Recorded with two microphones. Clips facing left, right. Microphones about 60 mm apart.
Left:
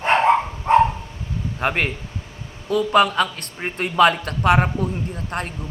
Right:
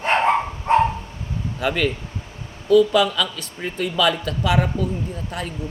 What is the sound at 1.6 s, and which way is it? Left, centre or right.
A man's voice, left.